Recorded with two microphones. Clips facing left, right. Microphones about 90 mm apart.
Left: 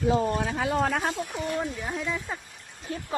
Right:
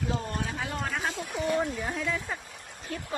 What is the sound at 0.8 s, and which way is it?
Speech, 85° left.